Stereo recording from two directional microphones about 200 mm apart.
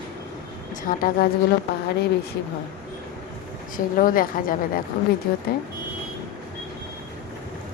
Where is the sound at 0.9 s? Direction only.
45° left (ahead or behind).